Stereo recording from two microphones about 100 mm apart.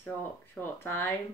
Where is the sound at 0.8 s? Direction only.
25° left (ahead or behind).